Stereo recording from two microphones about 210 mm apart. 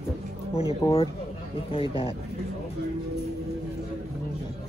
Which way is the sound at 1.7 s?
25° left (ahead or behind).